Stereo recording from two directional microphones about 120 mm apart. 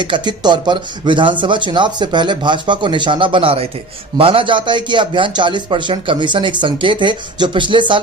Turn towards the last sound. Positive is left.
turn(degrees=-40)  # may be behind; listen again after turning